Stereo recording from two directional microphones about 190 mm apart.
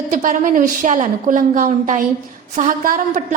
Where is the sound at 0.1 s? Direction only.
40° right (ahead or behind).